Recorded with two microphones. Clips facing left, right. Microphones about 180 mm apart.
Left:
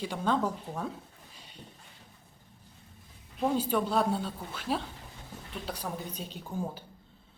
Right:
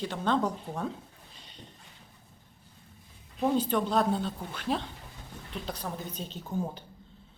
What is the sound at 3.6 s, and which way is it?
Speech, 10° left (ahead or behind).